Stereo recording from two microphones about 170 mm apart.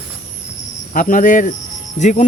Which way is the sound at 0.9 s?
50° left (ahead or behind).